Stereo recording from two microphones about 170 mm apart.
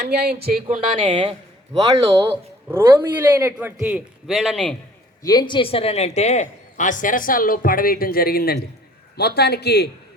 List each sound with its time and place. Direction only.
0.0 s speech: 70° right (ahead or behind)
0.4 s speech: 60° right (ahead or behind)
0.9 s speech: 30° right (ahead or behind)
1.9 s a man's voice: 20° right (ahead or behind); by 4.8 s 5° left (ahead or behind)
5.2 s a man's voice: 25° left (ahead or behind); by 9.9 s 75° left (ahead or behind)